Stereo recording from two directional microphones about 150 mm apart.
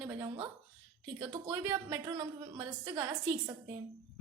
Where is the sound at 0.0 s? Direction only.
25° right (ahead or behind).